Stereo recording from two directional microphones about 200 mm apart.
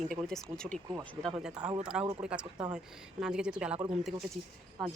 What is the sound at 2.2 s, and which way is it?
Speech, 5° right (ahead or behind).